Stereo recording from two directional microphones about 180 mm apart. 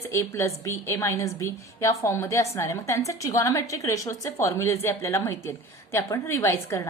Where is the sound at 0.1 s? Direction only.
15° left (ahead or behind).